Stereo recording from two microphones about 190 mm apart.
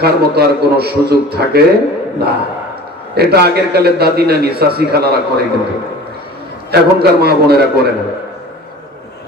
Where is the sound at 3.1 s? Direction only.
55° right (ahead or behind).